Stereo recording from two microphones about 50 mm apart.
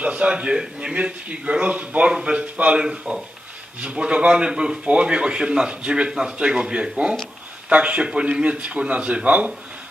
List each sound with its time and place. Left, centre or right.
0.0 s a man's voice: right